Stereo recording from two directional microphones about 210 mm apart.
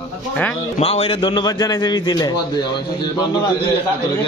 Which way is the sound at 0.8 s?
30° left (ahead or behind).